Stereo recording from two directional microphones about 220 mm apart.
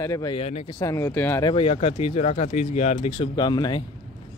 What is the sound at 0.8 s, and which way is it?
Speech, 15° left (ahead or behind).